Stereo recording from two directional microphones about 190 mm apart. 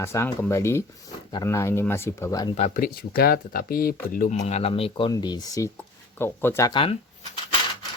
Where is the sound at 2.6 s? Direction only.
40° left (ahead or behind).